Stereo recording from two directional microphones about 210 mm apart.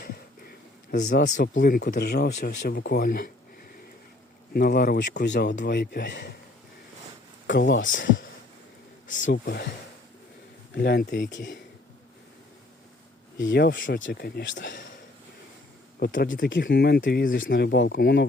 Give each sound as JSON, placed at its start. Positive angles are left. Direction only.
{"t": 0.0, "sound": "speech", "side_deg": 45}
{"t": 4.5, "sound": "speech", "side_deg": 45}
{"t": 7.4, "sound": "speech", "side_deg": 60}
{"t": 9.0, "sound": "speech", "side_deg": 40}
{"t": 10.8, "sound": "speech", "side_deg": 50}
{"t": 13.5, "sound": "speech", "side_deg": 55}
{"t": 16.0, "sound": "speech", "side_deg": 45}
{"t": 16.5, "sound": "speech", "side_deg": 50}